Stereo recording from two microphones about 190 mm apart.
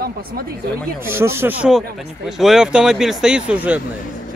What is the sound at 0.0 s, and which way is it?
Speech, 50° right (ahead or behind).